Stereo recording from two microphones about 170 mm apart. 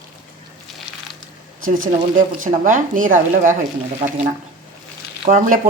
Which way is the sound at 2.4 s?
50° right (ahead or behind).